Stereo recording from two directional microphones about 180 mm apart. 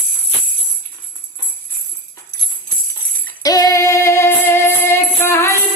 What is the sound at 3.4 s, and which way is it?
Music, 20° left (ahead or behind).